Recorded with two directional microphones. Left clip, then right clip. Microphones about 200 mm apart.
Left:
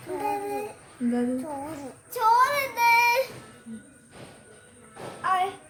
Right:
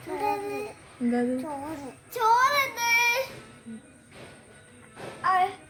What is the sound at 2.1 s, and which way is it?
Child singing, 15° left (ahead or behind).